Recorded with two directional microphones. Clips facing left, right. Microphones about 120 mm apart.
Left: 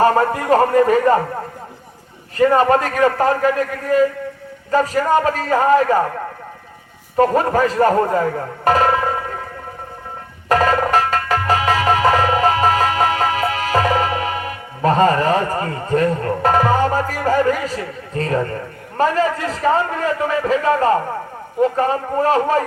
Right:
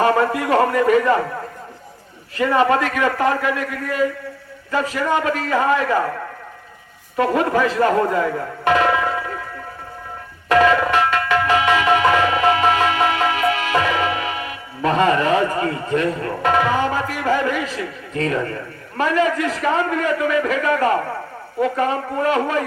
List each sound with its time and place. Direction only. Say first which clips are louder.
0.0 s a man's voice: left 2 dB; 35° left (ahead or behind)
2.4 s a man's voice: left 3 dB; 40° left (ahead or behind)
7.2 s a man's voice: left 3 dB; 40° left (ahead or behind)
10.5 s music: even; 40° left (ahead or behind)
18.9 s a man's voice: left 1 dB; 35° left (ahead or behind)